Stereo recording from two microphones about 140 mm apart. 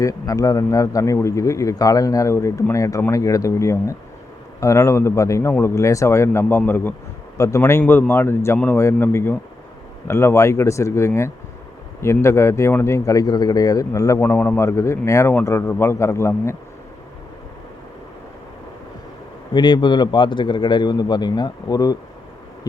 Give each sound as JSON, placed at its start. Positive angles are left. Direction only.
{"t": 0.0, "sound": "a man's voice", "side_deg": 25}
{"t": 19.5, "sound": "speech", "side_deg": 35}